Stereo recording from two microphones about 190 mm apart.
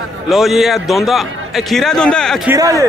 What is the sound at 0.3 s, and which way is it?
A man's voice, centre (ahead or behind).